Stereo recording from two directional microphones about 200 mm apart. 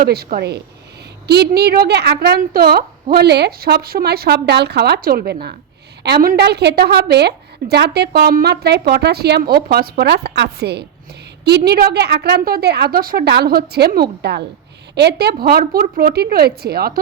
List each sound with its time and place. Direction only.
0.0 s a woman's voice: 50° right (ahead or behind)